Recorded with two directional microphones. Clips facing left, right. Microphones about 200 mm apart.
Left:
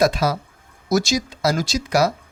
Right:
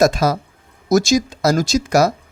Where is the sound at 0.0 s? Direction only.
45° right (ahead or behind).